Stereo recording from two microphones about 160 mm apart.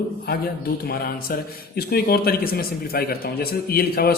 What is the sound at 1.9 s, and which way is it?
A man's voice, 75° left (ahead or behind).